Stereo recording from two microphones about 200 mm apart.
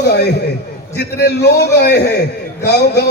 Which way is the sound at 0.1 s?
55° left (ahead or behind).